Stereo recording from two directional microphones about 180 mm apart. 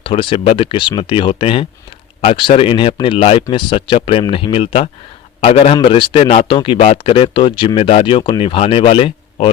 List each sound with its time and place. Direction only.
0.0 s a man's voice: 30° left (ahead or behind)